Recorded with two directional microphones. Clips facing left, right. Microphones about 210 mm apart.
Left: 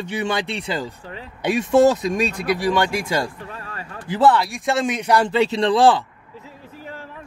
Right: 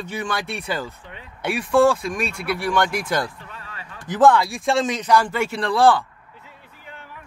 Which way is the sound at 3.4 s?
40° left (ahead or behind).